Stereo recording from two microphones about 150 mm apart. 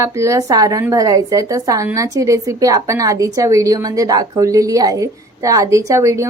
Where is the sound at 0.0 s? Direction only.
20° right (ahead or behind).